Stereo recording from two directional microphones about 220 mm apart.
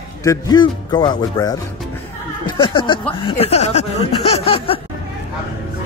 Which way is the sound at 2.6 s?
20° left (ahead or behind).